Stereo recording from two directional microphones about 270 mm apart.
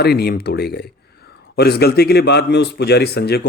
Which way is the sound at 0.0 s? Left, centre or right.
Left.